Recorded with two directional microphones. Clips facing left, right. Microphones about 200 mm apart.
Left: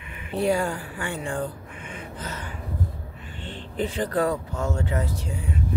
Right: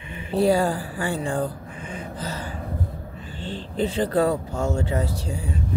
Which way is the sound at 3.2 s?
35° right (ahead or behind).